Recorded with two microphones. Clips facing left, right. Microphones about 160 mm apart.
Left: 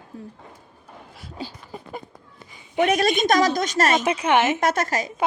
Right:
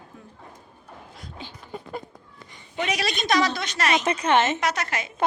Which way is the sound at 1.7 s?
5° left (ahead or behind).